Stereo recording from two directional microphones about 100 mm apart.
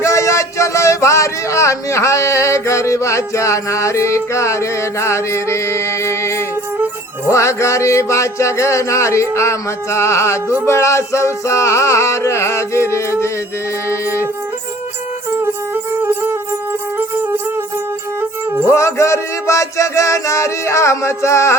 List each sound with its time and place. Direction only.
0.0 s music: 30° left (ahead or behind)
15.7 s music: 20° right (ahead or behind)
18.7 s music: 30° left (ahead or behind)